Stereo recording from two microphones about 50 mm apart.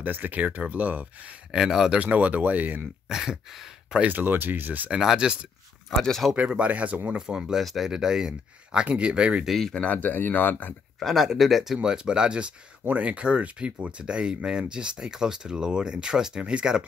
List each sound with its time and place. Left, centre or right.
0.0 s speech: right
1.5 s speech: centre
2.0 s speech: right
3.1 s a sound: centre
4.1 s speech: right
4.9 s speech: centre
5.9 s speech: centre
6.3 s speech: right
7.1 s speech: centre
9.5 s speech: centre
9.8 s speech: left
11.0 s speech: centre
12.8 s speech: right